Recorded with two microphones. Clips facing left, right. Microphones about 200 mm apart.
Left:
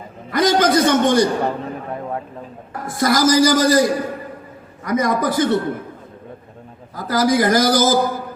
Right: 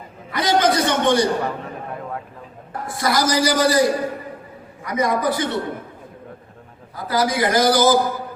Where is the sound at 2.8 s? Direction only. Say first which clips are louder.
Left 5 dB; 45° left (ahead or behind).